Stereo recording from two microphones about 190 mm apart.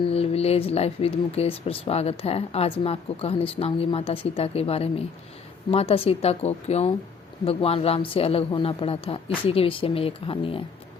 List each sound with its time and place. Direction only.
0.1 s speech: 30° left (ahead or behind)